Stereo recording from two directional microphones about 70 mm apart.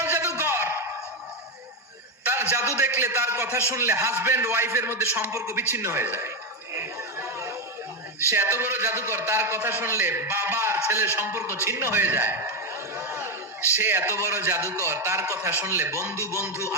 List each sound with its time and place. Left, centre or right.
0.0 s a sound: right
2.2 s a man's voice: right
5.3 s a man's voice: right
5.7 s a man's voice: right
6.7 s chatter: right
8.3 s a man's voice: right
13.0 s chatter: right
13.7 s a man's voice: right
15.6 s a man's voice: right
16.1 s music: left
16.5 s a sound: left